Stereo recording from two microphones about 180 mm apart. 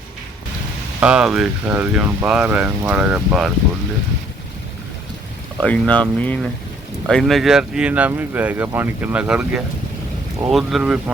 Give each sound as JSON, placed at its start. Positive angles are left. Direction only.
{"t": 0.9, "sound": "speech", "side_deg": -5}
{"t": 5.6, "sound": "speech", "side_deg": 5}